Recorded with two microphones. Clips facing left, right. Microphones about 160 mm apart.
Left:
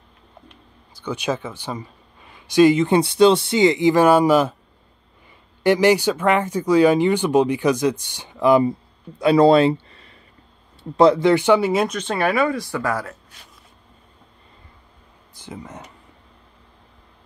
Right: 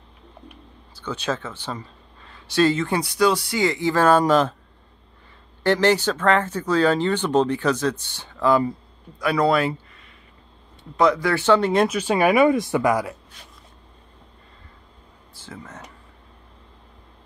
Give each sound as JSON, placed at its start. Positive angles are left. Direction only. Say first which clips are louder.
{"t": 0.9, "sound": "speech", "louder": "left 2 dB", "side_deg": 15}
{"t": 5.6, "sound": "speech", "louder": "left 3 dB", "side_deg": 10}
{"t": 15.3, "sound": "speech", "louder": "left 4 dB", "side_deg": 15}